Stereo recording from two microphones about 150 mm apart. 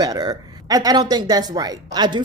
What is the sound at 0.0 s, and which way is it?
Speech, 25° right (ahead or behind).